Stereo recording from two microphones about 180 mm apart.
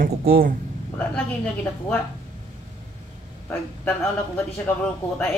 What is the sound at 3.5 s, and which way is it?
Speech, 10° left (ahead or behind).